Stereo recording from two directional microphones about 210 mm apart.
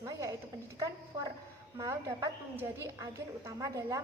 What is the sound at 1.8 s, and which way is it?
A woman's voice, 15° right (ahead or behind).